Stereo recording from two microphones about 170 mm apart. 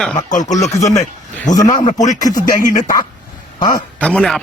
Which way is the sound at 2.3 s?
50° left (ahead or behind).